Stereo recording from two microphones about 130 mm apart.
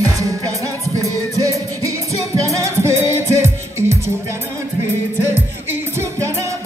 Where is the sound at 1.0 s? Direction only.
25° right (ahead or behind).